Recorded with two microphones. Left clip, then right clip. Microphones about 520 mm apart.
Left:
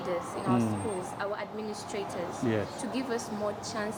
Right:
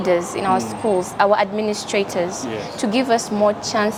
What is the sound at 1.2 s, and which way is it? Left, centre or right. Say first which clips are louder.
A woman's voice: right 18 dB; right.